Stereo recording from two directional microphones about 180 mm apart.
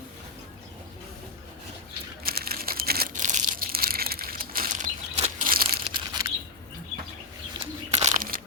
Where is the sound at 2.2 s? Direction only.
60° right (ahead or behind).